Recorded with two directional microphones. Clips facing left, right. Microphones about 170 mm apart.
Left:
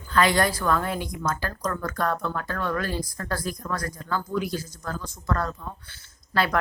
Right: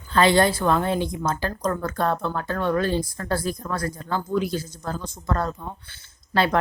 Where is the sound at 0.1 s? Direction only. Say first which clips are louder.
Right 4 dB; 30° right (ahead or behind).